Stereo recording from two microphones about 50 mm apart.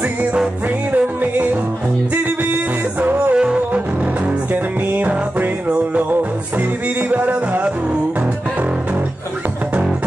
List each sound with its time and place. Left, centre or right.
0.9 s music: right
3.3 s music: right
4.9 s music: right